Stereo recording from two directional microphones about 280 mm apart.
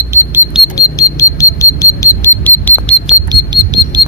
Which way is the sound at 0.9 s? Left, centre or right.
Centre.